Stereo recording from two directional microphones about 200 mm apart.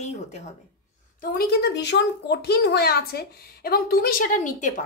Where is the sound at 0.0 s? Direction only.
35° left (ahead or behind).